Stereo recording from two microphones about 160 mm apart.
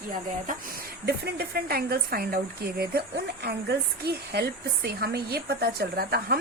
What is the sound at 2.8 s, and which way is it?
A woman's voice, 85° right.